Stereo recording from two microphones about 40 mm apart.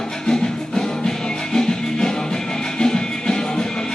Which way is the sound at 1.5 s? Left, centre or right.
Centre.